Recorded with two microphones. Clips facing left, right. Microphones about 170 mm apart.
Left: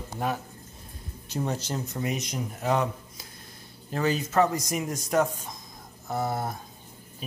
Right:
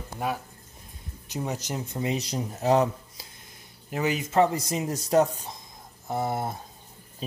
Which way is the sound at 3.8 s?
15° right (ahead or behind).